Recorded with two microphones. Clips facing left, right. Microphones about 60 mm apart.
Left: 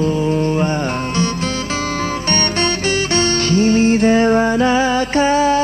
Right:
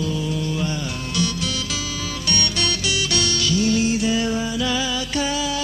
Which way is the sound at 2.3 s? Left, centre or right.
Left.